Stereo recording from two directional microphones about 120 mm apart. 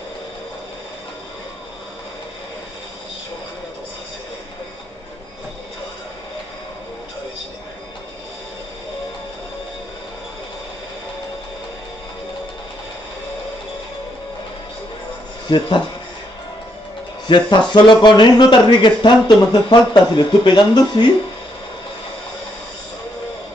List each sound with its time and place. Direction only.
15.5 s speech: 40° left (ahead or behind)
17.3 s speech: 40° left (ahead or behind)